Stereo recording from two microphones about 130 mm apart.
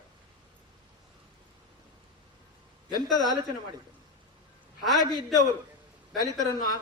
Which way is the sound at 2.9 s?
30° left (ahead or behind).